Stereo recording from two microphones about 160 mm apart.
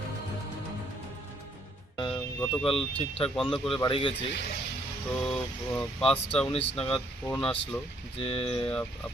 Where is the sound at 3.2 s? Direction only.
Centre (ahead or behind).